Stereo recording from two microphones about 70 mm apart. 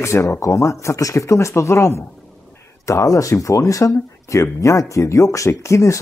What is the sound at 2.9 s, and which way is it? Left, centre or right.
Speech, left.